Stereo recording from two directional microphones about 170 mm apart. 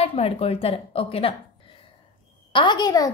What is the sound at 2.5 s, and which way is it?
Speech, 25° left (ahead or behind).